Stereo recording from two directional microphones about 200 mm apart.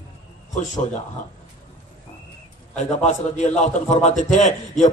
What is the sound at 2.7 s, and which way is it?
A man's voice, 35° left (ahead or behind).